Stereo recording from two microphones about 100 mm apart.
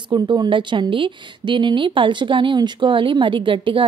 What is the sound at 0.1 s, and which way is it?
A woman's voice, 50° right (ahead or behind).